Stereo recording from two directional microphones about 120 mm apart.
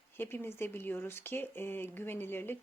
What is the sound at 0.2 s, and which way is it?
A woman's voice, 20° left (ahead or behind).